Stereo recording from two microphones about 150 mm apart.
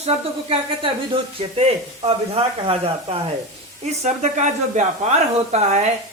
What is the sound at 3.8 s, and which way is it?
Speech, 50° right (ahead or behind).